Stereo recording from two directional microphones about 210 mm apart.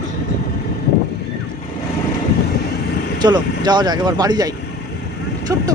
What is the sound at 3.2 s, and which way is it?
Speech, 20° right (ahead or behind).